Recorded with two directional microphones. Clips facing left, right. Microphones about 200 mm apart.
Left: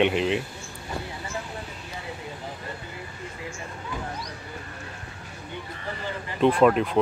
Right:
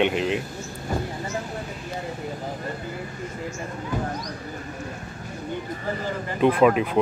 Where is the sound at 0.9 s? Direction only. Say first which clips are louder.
Right 6 dB; 45° right (ahead or behind).